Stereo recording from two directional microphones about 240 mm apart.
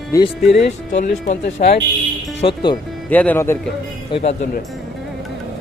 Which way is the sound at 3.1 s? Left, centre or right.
Centre.